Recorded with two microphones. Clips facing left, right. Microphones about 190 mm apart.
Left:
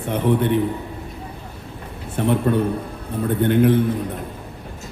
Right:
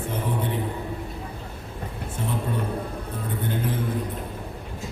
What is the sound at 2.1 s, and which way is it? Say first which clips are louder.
Speech: left 10 dB; 70° left (ahead or behind).